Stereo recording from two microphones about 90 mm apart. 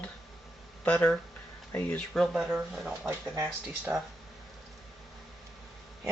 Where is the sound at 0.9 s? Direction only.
15° left (ahead or behind).